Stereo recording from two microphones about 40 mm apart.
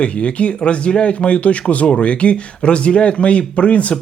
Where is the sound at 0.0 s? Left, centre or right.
Left.